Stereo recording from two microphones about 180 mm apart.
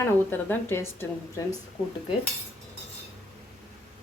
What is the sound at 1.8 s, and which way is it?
Cutlery, 30° left (ahead or behind).